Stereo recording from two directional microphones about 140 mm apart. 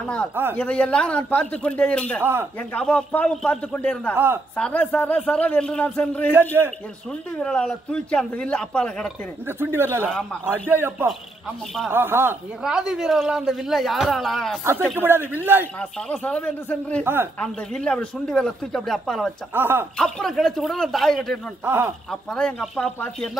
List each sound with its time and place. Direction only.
0.0 s a man's voice: 5° left (ahead or behind)
9.5 s speech: 15° right (ahead or behind)
12.6 s speech: 5° right (ahead or behind)
15.0 s speech: 15° right (ahead or behind)
15.6 s a man's voice: 10° left (ahead or behind)
17.0 s speech: 15° right (ahead or behind)
17.4 s speech: 5° left (ahead or behind)
19.5 s speech: 15° right (ahead or behind)
20.0 s speech: 5° left (ahead or behind)
21.6 s speech: 15° right (ahead or behind)
22.1 s speech: 5° left (ahead or behind)